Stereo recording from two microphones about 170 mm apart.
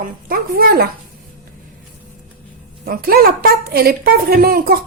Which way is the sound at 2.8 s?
60° right (ahead or behind).